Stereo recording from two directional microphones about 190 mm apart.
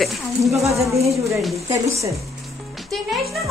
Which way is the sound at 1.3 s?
Centre (ahead or behind).